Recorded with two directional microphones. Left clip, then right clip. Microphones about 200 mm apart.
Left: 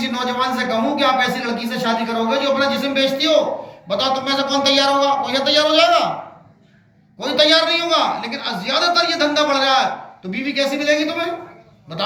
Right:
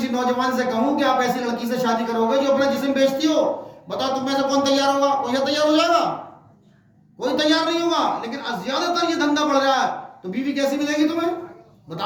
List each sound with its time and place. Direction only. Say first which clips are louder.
0.3 s speech: left 2 dB; 25° right (ahead or behind)
7.2 s speech: left 5 dB; 25° right (ahead or behind)